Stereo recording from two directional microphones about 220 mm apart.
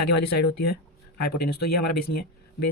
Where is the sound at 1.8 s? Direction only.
45° left (ahead or behind).